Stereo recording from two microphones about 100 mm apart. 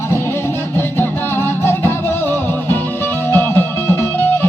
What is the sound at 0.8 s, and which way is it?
Music, 20° left (ahead or behind).